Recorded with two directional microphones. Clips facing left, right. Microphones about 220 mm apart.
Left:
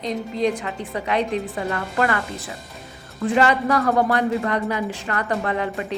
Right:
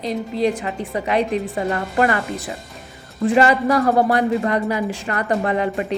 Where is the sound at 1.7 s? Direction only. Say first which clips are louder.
Right 4 dB; 20° right (ahead or behind).